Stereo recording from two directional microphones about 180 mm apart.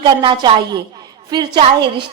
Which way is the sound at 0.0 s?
30° right (ahead or behind).